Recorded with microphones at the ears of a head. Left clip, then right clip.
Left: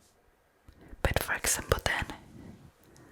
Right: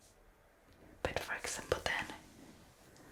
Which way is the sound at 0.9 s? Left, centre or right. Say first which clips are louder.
Left 8 dB; left.